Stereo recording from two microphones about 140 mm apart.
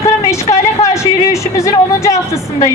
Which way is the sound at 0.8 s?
20° left (ahead or behind).